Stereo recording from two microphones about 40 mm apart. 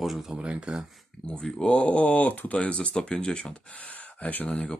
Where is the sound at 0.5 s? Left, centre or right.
Right.